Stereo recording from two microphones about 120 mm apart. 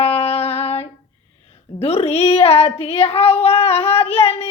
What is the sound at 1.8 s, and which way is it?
Speech, 55° left (ahead or behind).